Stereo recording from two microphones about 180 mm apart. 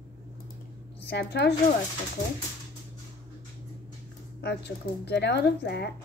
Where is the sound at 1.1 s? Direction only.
65° left (ahead or behind).